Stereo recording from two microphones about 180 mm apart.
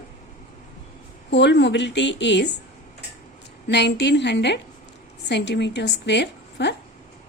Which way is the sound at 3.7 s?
70° left (ahead or behind).